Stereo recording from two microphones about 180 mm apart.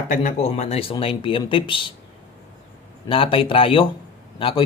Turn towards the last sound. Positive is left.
turn(degrees=30)  # may be behind; listen again after turning